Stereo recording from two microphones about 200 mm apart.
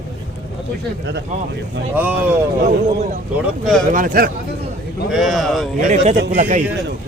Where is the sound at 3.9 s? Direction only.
45° right (ahead or behind).